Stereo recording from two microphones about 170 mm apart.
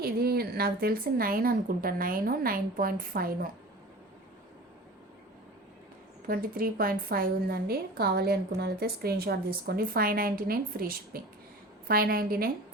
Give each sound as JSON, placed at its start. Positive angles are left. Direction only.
{"t": 0.0, "sound": "a woman's voice", "side_deg": -65}
{"t": 6.2, "sound": "a woman's voice", "side_deg": -55}